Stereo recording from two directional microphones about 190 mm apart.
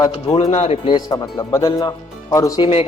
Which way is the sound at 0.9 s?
20° left (ahead or behind).